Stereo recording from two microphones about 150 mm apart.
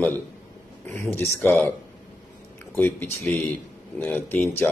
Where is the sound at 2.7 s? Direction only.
15° left (ahead or behind).